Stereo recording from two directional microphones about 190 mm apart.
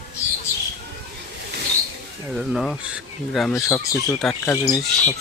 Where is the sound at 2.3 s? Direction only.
Centre (ahead or behind).